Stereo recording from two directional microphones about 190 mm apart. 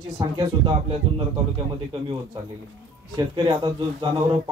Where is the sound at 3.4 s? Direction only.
20° right (ahead or behind).